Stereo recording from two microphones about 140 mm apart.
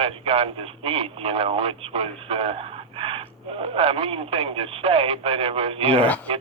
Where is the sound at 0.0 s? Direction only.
45° right (ahead or behind).